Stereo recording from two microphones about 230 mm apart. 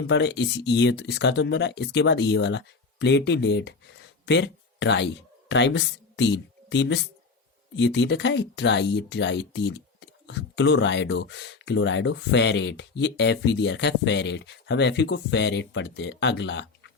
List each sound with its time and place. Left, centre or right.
0.1 s speech: left